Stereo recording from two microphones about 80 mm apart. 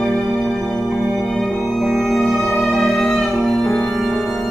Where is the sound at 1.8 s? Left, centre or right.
Centre.